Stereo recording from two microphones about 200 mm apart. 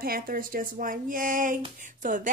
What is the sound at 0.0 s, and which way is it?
A woman's voice, 45° right (ahead or behind).